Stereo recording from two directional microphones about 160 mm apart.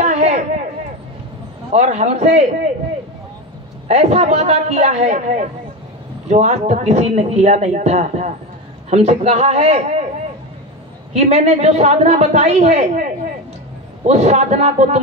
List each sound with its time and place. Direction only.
0.0 s a sound: 45° right (ahead or behind)
1.7 s a woman's voice: 45° right (ahead or behind)
3.8 s a woman's voice: 45° right (ahead or behind)
11.1 s a woman's voice: 45° right (ahead or behind)